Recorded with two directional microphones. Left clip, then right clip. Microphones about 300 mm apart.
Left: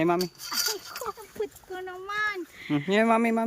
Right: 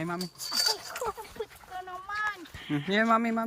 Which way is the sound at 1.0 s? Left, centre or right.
Left.